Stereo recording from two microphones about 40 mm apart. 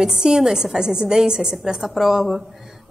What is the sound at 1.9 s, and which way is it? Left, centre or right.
Speech, centre.